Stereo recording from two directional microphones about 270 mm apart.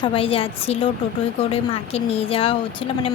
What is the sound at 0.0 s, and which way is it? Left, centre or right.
Speech, centre.